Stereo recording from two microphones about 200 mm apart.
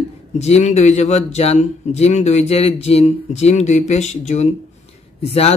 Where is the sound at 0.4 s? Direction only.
35° left (ahead or behind).